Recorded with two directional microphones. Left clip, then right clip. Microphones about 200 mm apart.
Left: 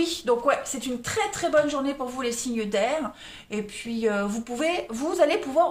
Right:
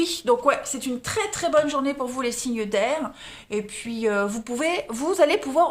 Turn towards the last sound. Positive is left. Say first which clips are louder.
# right 2 dB
turn(degrees=-40)  # may be behind; listen again after turning